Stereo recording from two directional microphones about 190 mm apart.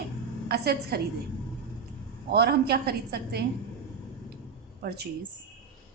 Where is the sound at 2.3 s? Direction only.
55° right (ahead or behind).